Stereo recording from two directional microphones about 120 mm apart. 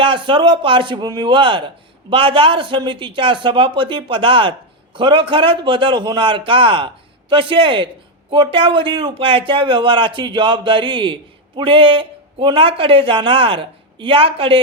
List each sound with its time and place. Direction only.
0.0 s a man's voice: 45° right (ahead or behind)